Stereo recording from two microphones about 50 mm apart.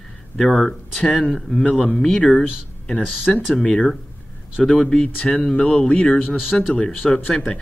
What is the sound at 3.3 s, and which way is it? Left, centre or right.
Speech, centre.